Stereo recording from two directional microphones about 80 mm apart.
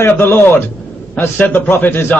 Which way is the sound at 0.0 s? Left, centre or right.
Left.